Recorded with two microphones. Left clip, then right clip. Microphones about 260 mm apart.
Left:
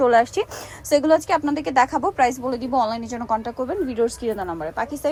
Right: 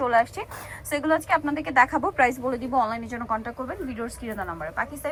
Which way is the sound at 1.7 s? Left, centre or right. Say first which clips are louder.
Left 1 dB; centre.